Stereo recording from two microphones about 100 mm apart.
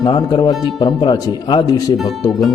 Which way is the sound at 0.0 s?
45° left (ahead or behind).